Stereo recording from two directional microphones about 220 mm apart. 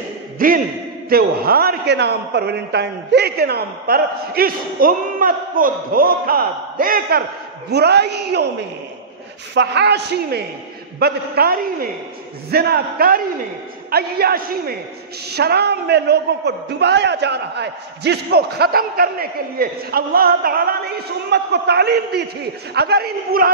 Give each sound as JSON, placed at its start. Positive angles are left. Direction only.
{"t": 0.4, "sound": "a sound", "side_deg": -40}
{"t": 1.0, "sound": "a man's voice", "side_deg": -45}
{"t": 9.5, "sound": "a man's voice", "side_deg": -50}